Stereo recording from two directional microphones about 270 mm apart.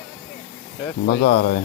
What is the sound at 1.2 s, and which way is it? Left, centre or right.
Speech, left.